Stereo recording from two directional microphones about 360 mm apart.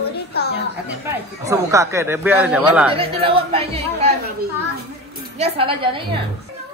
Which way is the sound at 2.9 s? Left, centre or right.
Centre.